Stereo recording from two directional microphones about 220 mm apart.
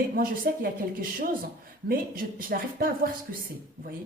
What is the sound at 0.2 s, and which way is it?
A woman's voice, 40° right (ahead or behind).